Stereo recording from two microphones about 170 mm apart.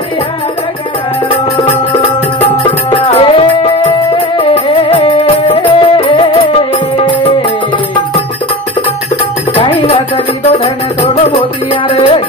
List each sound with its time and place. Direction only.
2.6 s music: 30° left (ahead or behind)
9.6 s music: 30° left (ahead or behind)